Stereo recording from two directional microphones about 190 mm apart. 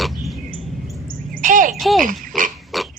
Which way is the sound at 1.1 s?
45° right (ahead or behind).